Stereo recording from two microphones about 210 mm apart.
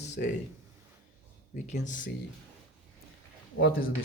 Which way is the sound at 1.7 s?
35° left (ahead or behind).